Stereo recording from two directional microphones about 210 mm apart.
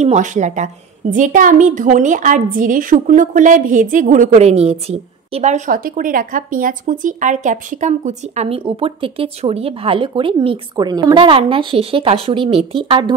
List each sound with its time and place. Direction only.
0.0 s a woman's voice: 35° right (ahead or behind)